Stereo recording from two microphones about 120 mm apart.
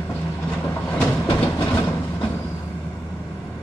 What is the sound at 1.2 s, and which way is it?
Train, 20° left (ahead or behind).